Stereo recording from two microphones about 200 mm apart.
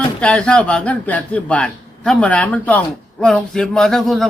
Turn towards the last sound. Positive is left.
turn(degrees=0)  # may be behind; listen again after turning